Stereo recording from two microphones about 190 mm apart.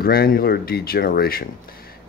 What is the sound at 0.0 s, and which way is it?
Speech, 50° left (ahead or behind).